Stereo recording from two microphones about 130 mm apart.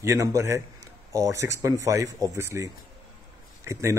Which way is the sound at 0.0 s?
25° right (ahead or behind).